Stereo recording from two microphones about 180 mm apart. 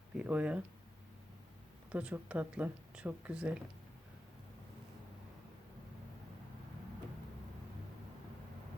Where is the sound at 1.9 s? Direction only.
5° right (ahead or behind).